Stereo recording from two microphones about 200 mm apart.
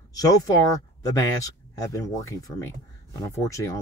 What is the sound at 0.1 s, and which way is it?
Speech, 15° left (ahead or behind).